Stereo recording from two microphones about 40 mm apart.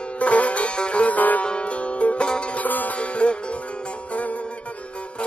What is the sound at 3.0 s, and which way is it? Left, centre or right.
Music, left.